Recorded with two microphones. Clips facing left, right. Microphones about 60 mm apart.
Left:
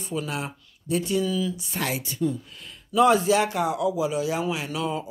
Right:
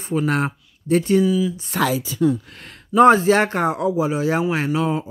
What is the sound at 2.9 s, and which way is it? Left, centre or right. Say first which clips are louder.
Speech: right 6 dB; right.